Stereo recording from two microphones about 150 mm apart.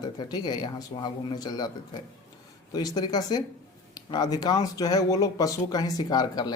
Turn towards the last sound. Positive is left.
turn(degrees=25)  # may be behind; listen again after turning